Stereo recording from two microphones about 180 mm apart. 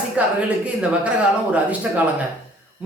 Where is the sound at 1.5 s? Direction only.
10° right (ahead or behind).